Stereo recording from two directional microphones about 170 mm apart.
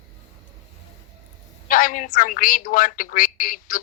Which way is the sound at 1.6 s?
55° left (ahead or behind).